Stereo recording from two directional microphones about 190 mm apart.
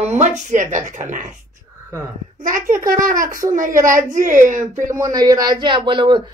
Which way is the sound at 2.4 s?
45° right (ahead or behind).